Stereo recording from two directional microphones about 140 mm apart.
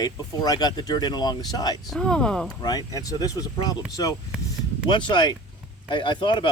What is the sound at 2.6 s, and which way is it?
Speech, 30° left (ahead or behind).